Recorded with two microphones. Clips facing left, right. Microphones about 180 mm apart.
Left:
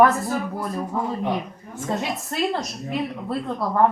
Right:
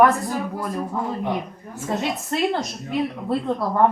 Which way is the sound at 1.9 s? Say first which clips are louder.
Right 2 dB; centre (ahead or behind).